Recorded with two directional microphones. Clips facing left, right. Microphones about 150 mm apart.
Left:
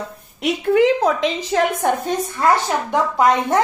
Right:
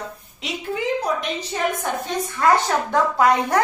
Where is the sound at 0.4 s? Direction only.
65° left (ahead or behind); by 1.9 s 90° left.